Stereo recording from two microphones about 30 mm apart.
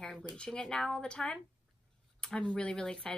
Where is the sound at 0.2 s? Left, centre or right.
Left.